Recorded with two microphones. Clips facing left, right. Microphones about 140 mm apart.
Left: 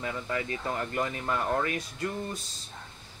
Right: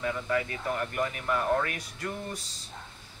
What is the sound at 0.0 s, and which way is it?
Speech, 25° left (ahead or behind).